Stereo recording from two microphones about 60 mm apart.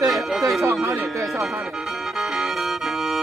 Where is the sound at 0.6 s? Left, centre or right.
Right.